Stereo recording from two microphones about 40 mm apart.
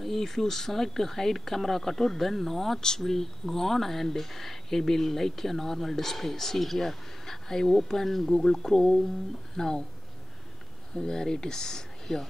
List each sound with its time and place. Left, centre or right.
0.0 s speech: centre
11.0 s speech: centre